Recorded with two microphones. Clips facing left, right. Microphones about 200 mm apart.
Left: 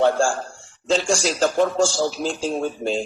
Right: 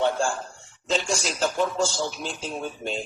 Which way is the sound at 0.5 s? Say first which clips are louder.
Left 5 dB; 30° left (ahead or behind).